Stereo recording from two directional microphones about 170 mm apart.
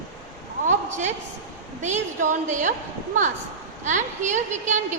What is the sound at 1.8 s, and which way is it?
A woman's voice, 45° right (ahead or behind).